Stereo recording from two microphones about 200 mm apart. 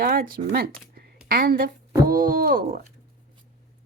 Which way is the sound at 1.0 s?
50° right (ahead or behind).